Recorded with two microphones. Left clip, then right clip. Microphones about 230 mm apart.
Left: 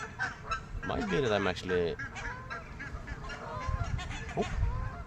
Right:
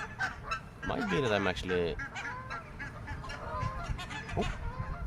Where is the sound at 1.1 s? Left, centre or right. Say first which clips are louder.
Left 1 dB; centre.